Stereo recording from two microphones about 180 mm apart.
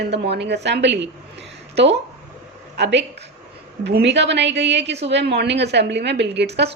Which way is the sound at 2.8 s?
75° right (ahead or behind).